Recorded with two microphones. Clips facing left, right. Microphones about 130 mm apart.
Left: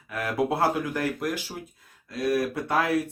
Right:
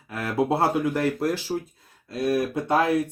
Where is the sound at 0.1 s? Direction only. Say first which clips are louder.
Right 2 dB; 30° right (ahead or behind).